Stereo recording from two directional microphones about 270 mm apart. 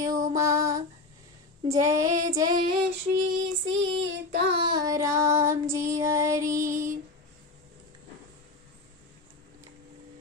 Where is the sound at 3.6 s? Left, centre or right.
Right.